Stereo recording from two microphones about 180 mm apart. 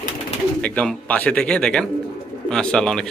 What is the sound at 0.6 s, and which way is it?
Speech, 5° left (ahead or behind).